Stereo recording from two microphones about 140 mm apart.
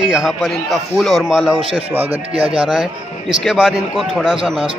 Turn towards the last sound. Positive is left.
turn(degrees=0)  # may be behind; listen again after turning